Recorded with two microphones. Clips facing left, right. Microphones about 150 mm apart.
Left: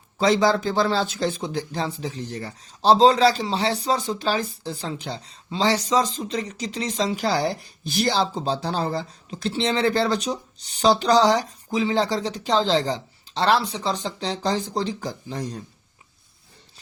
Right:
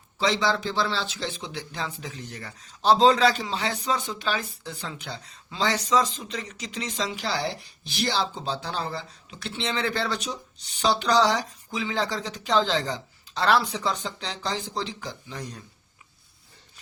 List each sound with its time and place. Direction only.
0.2 s speech: 45° left (ahead or behind)